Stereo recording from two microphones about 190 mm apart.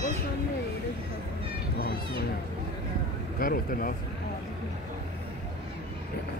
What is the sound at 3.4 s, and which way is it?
Speech, 50° left (ahead or behind).